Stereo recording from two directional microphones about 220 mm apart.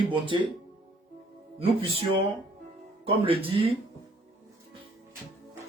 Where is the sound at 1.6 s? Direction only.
25° right (ahead or behind).